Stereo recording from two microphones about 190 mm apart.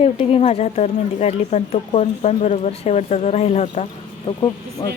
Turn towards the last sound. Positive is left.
turn(degrees=20)  # may be behind; listen again after turning